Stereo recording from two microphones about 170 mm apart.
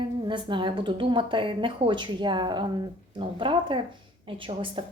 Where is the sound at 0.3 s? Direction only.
30° right (ahead or behind).